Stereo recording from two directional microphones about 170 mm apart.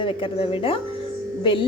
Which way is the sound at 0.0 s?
30° left (ahead or behind).